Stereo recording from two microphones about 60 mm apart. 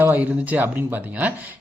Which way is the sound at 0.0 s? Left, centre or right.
Right.